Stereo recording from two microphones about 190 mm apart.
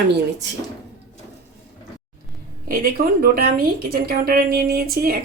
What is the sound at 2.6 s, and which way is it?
A woman's voice, 50° right (ahead or behind).